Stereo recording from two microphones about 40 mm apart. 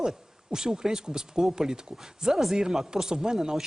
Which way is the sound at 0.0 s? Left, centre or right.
Centre.